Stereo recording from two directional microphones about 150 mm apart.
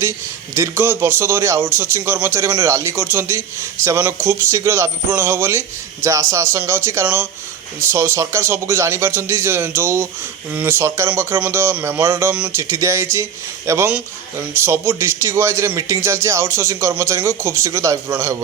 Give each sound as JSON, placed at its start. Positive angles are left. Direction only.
{"t": 0.5, "sound": "a man's voice", "side_deg": -15}